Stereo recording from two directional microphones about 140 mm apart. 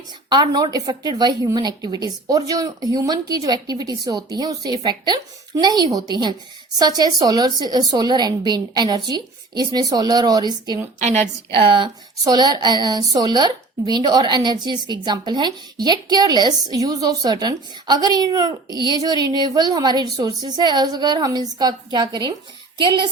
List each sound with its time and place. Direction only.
0.3 s a woman's voice: 30° right (ahead or behind)